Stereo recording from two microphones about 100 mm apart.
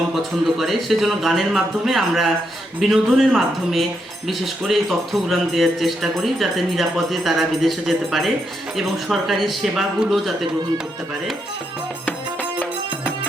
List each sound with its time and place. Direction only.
0.1 s speech: centre (ahead or behind)
12.0 s music: 15° left (ahead or behind)